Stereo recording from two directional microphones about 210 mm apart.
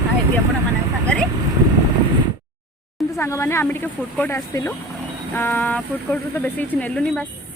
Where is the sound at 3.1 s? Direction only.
10° left (ahead or behind).